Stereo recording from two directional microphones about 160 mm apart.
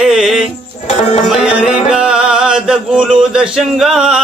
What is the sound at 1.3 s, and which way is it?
Music, 5° right (ahead or behind).